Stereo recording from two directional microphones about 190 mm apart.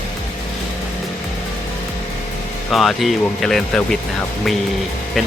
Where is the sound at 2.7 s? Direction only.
Centre (ahead or behind).